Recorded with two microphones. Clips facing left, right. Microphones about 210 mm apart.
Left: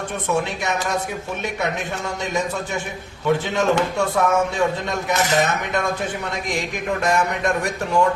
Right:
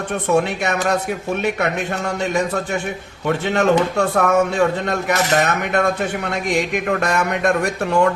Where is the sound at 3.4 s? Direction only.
65° right (ahead or behind).